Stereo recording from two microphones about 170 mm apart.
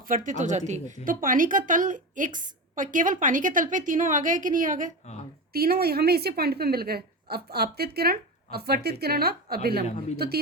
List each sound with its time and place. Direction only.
0.1 s a woman's voice: 50° right (ahead or behind)
5.5 s a woman's voice: 65° right (ahead or behind)